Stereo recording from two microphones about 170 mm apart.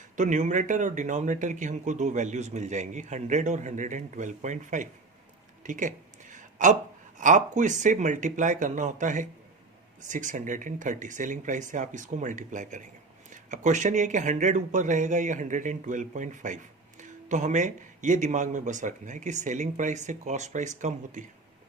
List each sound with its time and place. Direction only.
0.2 s speech: 45° right (ahead or behind)
5.6 s a sound: 50° right (ahead or behind)
7.2 s speech: 45° right (ahead or behind)